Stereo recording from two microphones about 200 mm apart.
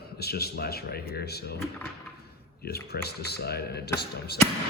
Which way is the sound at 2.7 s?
50° left (ahead or behind).